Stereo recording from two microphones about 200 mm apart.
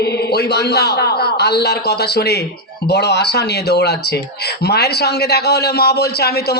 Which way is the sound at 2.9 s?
55° left (ahead or behind).